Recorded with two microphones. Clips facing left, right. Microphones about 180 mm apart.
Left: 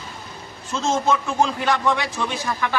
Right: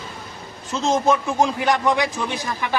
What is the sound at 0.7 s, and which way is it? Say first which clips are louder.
A man's voice: right 2 dB; 15° right (ahead or behind).